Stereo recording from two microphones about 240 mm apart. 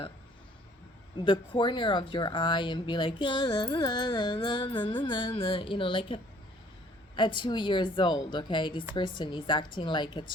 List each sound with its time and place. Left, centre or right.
1.1 s speech: centre
7.2 s speech: centre